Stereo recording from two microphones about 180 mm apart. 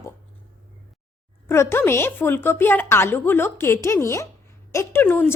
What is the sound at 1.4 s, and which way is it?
A woman's voice, 15° left (ahead or behind).